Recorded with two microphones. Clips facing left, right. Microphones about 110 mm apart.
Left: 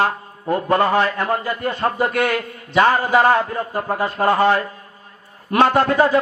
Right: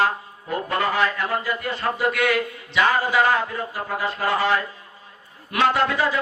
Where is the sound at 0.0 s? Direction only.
40° left (ahead or behind).